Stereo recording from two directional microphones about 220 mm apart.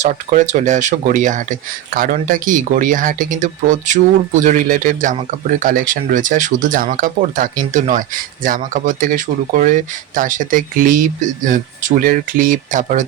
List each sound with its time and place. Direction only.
0.0 s speech: 35° right (ahead or behind)